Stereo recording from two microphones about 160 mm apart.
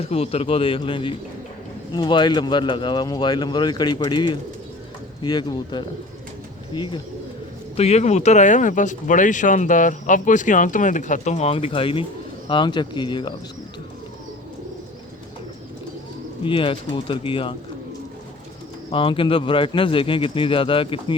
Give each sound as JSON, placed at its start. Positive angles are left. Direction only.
{"t": 0.0, "sound": "a man's voice", "side_deg": 40}
{"t": 7.8, "sound": "speech", "side_deg": 40}
{"t": 16.4, "sound": "a man's voice", "side_deg": 35}
{"t": 18.9, "sound": "a man's voice", "side_deg": 35}